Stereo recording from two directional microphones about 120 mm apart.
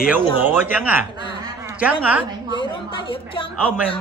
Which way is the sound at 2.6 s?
45° left (ahead or behind).